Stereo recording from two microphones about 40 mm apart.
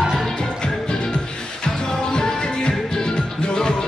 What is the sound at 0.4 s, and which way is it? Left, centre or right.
Music, left.